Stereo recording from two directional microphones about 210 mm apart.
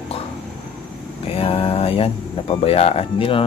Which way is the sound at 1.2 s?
25° left (ahead or behind).